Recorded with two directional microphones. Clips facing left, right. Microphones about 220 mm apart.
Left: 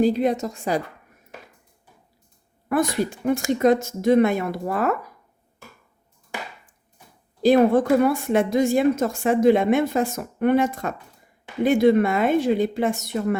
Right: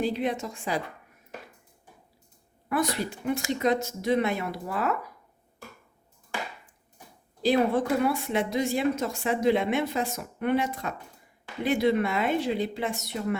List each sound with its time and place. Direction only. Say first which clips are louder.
0.0 s a woman's voice: left 8 dB; 40° left (ahead or behind)
2.6 s speech: left 6 dB; 45° left (ahead or behind)
7.4 s speech: left 7 dB; 45° left (ahead or behind)